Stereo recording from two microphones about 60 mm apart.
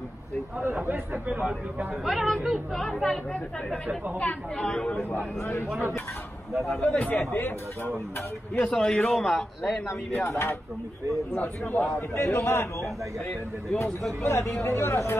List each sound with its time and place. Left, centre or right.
0.8 s speech: right
2.0 s a man's voice: centre
4.2 s a man's voice: left
5.4 s speech: left
6.8 s a man's voice: left
7.3 s speech: left
8.5 s a man's voice: centre
10.2 s speech: left
11.4 s a man's voice: left
12.2 s speech: left
14.2 s speech: left